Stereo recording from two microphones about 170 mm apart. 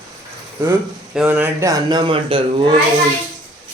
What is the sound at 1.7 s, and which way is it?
Speech, 25° right (ahead or behind).